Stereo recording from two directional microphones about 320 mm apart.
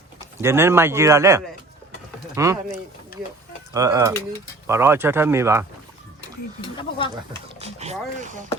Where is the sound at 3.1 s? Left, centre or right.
Left.